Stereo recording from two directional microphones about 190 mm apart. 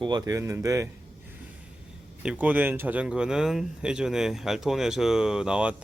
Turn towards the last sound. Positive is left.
turn(degrees=-5)  # may be behind; listen again after turning